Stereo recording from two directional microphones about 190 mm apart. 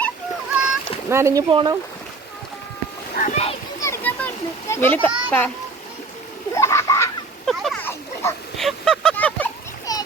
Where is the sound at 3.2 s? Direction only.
40° left (ahead or behind).